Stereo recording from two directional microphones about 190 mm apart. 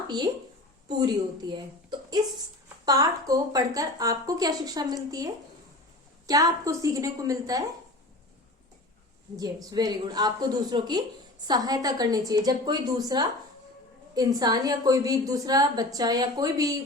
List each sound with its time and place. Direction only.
0.9 s a woman's voice: 20° right (ahead or behind)
6.2 s a woman's voice: 20° right (ahead or behind)
9.3 s a woman's voice: 20° right (ahead or behind)